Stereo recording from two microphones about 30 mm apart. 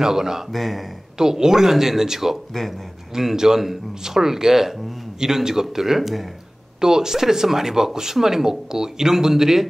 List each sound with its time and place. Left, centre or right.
0.0 s speech: centre
0.5 s speech: centre
1.1 s speech: centre
3.3 s speech: centre
6.8 s speech: centre